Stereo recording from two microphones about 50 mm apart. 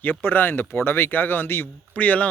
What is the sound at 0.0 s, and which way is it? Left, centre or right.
Speech, left.